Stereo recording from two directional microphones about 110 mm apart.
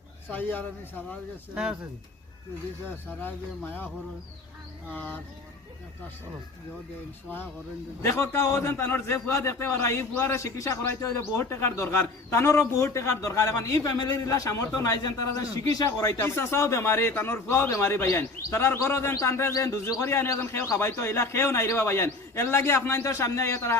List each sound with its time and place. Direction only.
0.3 s speech: 15° left (ahead or behind)
3.2 s speech: 20° left (ahead or behind)
4.9 s speech: 15° left (ahead or behind)
7.3 s a man's voice: 20° left (ahead or behind)